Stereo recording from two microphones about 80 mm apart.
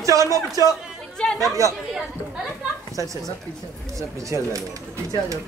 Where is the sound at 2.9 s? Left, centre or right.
Right.